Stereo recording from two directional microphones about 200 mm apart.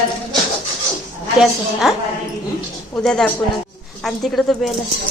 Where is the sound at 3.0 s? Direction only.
5° left (ahead or behind).